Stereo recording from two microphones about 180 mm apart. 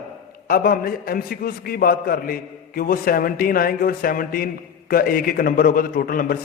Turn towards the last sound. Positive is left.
turn(degrees=55)  # may be behind; listen again after turning